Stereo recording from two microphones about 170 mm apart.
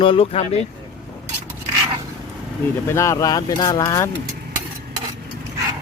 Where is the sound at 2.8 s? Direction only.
15° left (ahead or behind).